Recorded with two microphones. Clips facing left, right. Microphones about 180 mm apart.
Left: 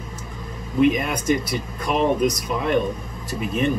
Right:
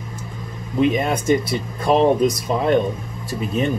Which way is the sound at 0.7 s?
30° right (ahead or behind).